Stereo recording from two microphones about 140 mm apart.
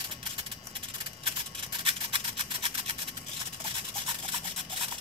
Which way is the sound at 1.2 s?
40° right (ahead or behind).